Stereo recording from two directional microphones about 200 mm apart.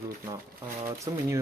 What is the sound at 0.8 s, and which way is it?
Speech, 15° right (ahead or behind).